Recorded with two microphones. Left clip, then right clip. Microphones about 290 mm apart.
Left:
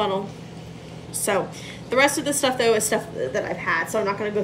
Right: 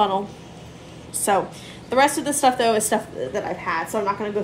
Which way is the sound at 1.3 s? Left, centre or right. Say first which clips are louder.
Right 3 dB; right.